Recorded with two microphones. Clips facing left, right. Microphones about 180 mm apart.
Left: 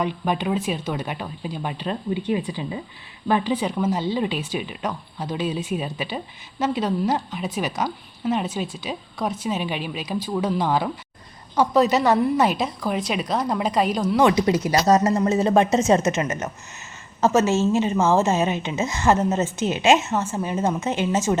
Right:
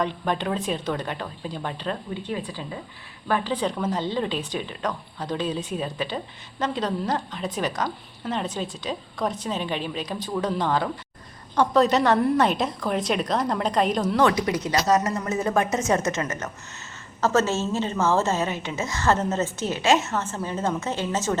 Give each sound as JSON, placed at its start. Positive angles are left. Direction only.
{"t": 0.0, "sound": "a woman's voice", "side_deg": 10}
{"t": 14.2, "sound": "a woman's voice", "side_deg": 15}
{"t": 14.7, "sound": "a woman's voice", "side_deg": 30}